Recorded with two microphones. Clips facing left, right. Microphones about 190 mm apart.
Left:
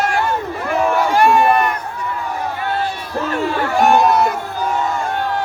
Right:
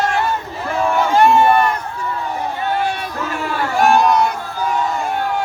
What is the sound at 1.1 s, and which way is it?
Run, 25° right (ahead or behind).